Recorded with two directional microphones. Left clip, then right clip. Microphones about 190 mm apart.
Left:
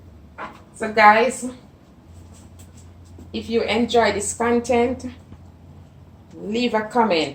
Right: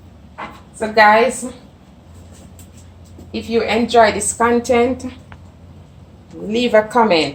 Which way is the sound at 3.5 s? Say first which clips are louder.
Right 5 dB; 15° right (ahead or behind).